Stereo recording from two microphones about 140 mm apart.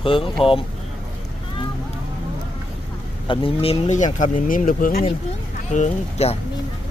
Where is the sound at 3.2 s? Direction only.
40° left (ahead or behind); by 5.0 s 75° left (ahead or behind).